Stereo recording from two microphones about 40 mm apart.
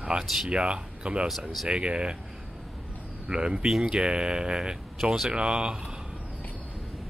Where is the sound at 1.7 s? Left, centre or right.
Right.